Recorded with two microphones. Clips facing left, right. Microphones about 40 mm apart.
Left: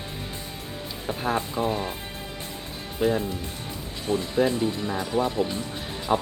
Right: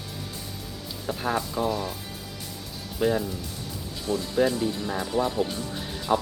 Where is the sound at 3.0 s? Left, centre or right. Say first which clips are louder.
Left 1 dB; centre.